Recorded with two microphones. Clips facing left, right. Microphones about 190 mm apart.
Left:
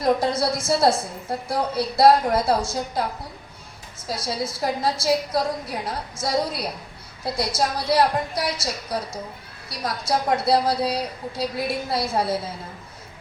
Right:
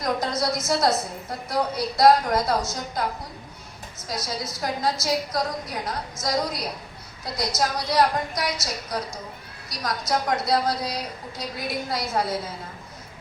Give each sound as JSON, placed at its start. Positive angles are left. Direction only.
{"t": 0.0, "sound": "a woman's voice", "side_deg": 30}
{"t": 4.0, "sound": "a woman's voice", "side_deg": 30}